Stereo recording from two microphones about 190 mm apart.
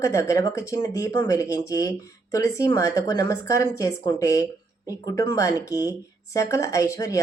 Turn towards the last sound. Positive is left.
turn(degrees=15)  # may be behind; listen again after turning